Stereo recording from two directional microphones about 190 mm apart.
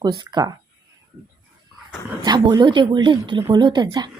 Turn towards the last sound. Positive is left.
turn(degrees=-20)  # may be behind; listen again after turning